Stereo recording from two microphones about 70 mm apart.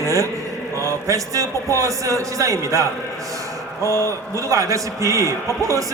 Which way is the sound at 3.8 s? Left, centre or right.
Left.